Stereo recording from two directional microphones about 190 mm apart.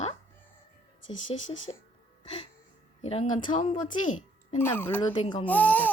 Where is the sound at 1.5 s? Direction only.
85° left.